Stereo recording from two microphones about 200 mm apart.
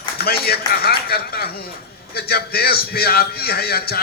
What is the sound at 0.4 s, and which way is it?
A man's voice, 50° left (ahead or behind).